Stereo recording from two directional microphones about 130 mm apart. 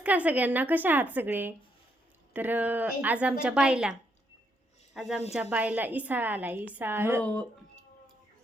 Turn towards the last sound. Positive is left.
turn(degrees=10)  # may be behind; listen again after turning